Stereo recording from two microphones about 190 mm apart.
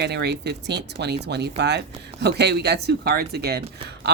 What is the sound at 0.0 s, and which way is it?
A woman's voice, 60° right (ahead or behind).